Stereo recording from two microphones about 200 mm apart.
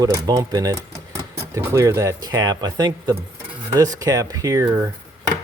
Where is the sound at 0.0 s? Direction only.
20° right (ahead or behind).